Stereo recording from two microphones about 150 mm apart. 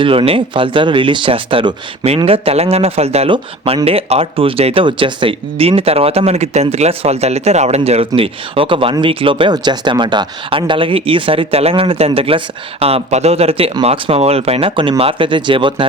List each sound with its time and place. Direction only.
0.0 s speech: 35° right (ahead or behind)